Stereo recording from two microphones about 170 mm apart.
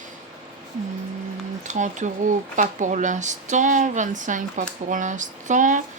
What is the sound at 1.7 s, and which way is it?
A woman's voice, 45° right (ahead or behind).